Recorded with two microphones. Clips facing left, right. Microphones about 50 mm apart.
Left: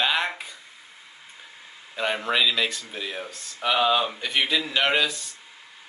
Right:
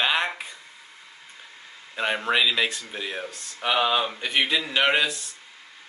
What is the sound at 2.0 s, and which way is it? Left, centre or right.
Speech, centre.